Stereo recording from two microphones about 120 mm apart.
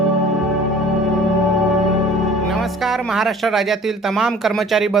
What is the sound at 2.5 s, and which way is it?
Speech, centre (ahead or behind).